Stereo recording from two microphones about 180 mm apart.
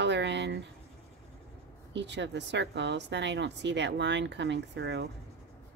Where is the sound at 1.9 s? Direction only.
80° right.